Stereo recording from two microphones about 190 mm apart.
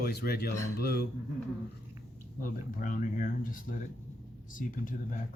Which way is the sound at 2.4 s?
45° left (ahead or behind).